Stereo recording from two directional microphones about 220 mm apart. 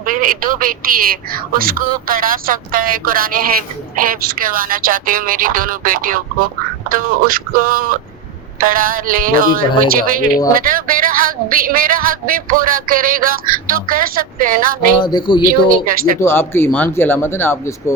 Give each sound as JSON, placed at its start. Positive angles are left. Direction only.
{"t": 0.1, "sound": "speech", "side_deg": -40}
{"t": 15.0, "sound": "speech", "side_deg": 20}
{"t": 15.4, "sound": "speech", "side_deg": -40}
{"t": 16.2, "sound": "speech", "side_deg": 10}